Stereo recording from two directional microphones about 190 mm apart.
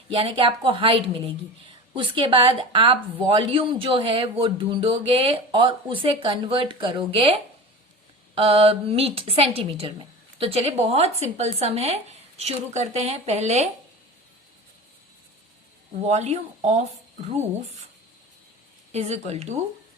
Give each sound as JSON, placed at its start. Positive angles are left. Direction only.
{"t": 0.1, "sound": "speech", "side_deg": -30}
{"t": 8.4, "sound": "a woman's voice", "side_deg": -30}
{"t": 16.0, "sound": "a woman's voice", "side_deg": -35}
{"t": 18.9, "sound": "a woman's voice", "side_deg": -35}